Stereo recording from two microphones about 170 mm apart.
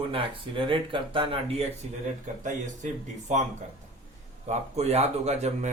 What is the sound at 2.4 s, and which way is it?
Speech, 45° right (ahead or behind).